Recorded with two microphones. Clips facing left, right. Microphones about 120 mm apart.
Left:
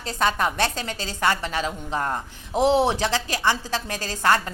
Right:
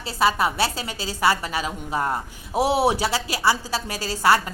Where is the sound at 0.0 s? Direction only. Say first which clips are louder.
Right 2 dB; 5° right (ahead or behind).